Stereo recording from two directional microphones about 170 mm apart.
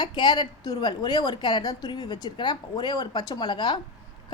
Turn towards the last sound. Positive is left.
turn(degrees=25)  # may be behind; listen again after turning